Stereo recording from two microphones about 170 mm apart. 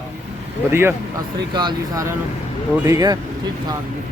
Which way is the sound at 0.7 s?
15° right (ahead or behind).